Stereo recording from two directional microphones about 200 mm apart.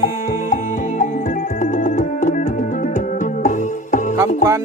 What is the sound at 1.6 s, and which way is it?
Music, 40° left (ahead or behind).